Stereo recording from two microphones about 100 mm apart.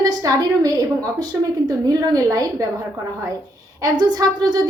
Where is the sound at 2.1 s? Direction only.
35° right (ahead or behind).